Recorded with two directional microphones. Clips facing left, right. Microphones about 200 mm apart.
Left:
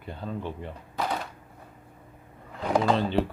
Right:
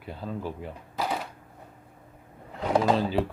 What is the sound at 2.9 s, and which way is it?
Speech, 5° right (ahead or behind).